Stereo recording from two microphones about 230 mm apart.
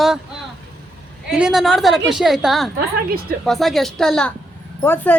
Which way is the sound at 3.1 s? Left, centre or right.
Right.